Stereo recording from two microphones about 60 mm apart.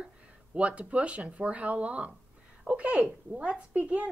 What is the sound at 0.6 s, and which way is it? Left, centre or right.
Speech, right.